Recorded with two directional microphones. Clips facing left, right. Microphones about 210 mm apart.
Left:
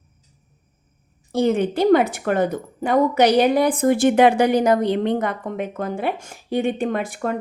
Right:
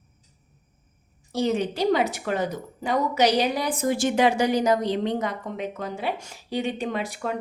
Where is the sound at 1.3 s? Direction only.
55° left (ahead or behind).